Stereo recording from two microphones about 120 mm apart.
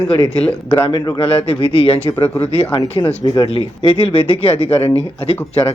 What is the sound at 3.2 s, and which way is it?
Speech, 45° left (ahead or behind).